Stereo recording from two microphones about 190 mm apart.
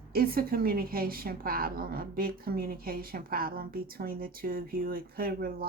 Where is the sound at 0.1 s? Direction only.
50° right (ahead or behind).